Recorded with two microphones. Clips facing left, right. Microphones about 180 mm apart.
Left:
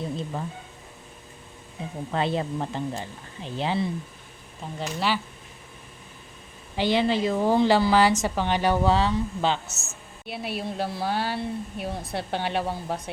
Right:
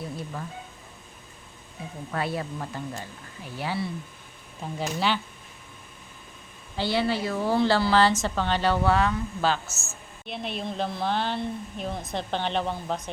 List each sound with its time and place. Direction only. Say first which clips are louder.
0.0 s speech: left 4 dB; 20° left (ahead or behind)
2.1 s speech: left 4 dB; 20° left (ahead or behind)
4.8 s speech: even; centre (ahead or behind)
6.7 s a woman's voice: left 3 dB; 15° left (ahead or behind)
10.2 s a woman's voice: left 1 dB; 5° left (ahead or behind)